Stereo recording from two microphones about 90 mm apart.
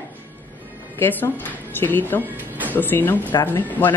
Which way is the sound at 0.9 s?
25° left (ahead or behind).